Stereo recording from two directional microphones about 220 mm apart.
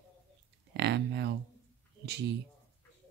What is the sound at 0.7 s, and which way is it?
Speech, 50° right (ahead or behind).